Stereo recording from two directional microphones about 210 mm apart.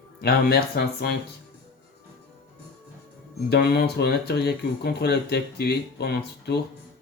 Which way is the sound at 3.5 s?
50° left (ahead or behind).